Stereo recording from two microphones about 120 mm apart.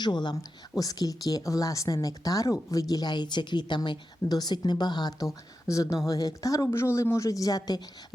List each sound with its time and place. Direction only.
0.0 s a woman's voice: 40° left (ahead or behind)